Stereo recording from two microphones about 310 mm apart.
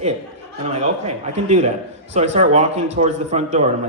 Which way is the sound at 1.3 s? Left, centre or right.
Right.